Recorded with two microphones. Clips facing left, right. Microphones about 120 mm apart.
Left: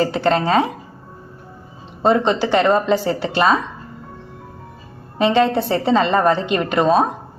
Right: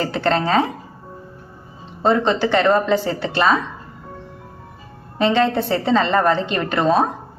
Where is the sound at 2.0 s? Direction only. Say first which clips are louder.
Left 1 dB; 20° left (ahead or behind).